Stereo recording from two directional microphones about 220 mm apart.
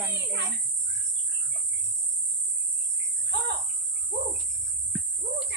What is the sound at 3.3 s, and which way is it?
Speech, 50° right (ahead or behind).